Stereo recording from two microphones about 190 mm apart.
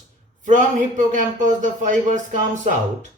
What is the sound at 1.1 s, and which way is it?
Speech, 40° right (ahead or behind).